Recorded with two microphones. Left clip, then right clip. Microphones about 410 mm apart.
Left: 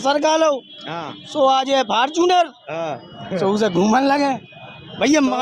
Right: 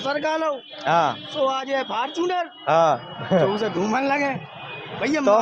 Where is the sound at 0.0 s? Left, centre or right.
Left.